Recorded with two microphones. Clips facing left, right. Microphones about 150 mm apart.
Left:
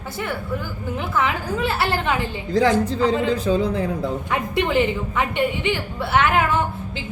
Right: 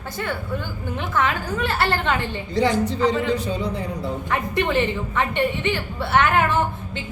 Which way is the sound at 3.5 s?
90° left.